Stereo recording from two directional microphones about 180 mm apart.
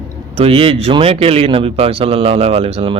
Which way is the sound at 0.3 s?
30° right (ahead or behind).